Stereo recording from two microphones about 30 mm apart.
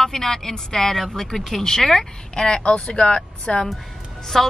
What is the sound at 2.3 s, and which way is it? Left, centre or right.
A woman's voice, left.